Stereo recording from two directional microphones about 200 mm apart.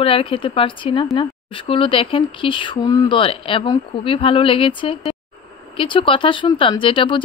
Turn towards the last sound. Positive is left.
turn(degrees=25)  # may be behind; listen again after turning